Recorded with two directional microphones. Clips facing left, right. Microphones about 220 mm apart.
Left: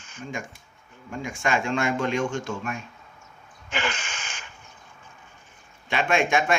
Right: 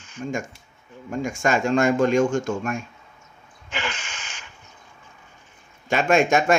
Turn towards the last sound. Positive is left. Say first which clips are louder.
# right 5 dB
turn(degrees=-40)  # may be behind; listen again after turning